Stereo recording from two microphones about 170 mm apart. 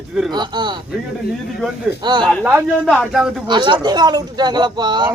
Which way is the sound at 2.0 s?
25° right (ahead or behind).